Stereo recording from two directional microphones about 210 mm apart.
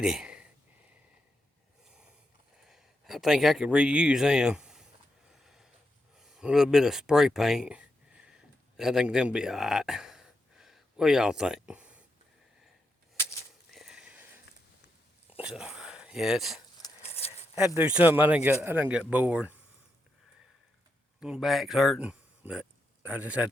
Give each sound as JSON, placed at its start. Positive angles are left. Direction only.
{"t": 0.0, "sound": "a sound", "side_deg": -5}
{"t": 1.8, "sound": "snort", "side_deg": -5}
{"t": 2.6, "sound": "speech", "side_deg": 0}
{"t": 5.3, "sound": "a sound", "side_deg": 0}
{"t": 13.7, "sound": "sniff", "side_deg": 0}
{"t": 15.4, "sound": "speech", "side_deg": -5}
{"t": 17.0, "sound": "a sound", "side_deg": 30}
{"t": 17.7, "sound": "speech", "side_deg": -5}
{"t": 21.2, "sound": "speech", "side_deg": 0}